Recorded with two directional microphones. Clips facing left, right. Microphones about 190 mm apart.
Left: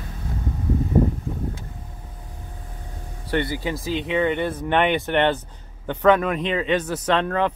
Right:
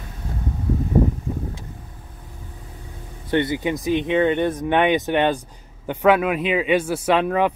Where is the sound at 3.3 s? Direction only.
20° right (ahead or behind).